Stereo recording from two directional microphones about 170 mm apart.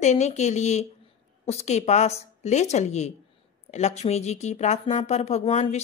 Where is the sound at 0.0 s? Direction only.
45° left (ahead or behind).